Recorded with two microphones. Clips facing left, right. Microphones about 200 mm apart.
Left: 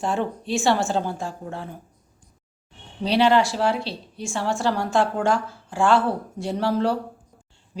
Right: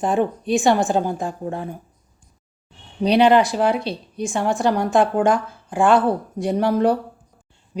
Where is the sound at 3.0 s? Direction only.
15° right (ahead or behind).